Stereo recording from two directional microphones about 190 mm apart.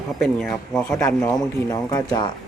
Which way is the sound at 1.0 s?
15° left (ahead or behind).